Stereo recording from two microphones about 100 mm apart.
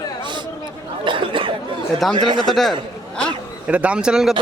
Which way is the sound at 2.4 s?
Centre (ahead or behind).